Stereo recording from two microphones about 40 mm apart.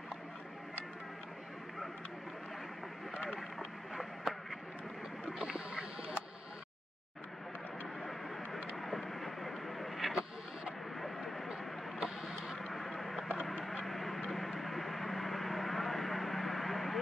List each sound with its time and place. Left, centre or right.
3.3 s boat: centre
5.4 s boat: right
8.0 s vehicle: centre
12.0 s vehicle: centre
12.7 s a sound: centre
13.8 s vehicle: centre
14.3 s a sound: centre